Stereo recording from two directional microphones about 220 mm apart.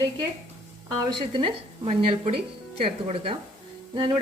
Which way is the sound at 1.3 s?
25° right (ahead or behind).